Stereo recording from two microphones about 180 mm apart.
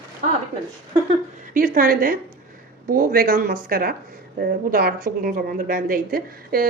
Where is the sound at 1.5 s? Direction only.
50° right (ahead or behind).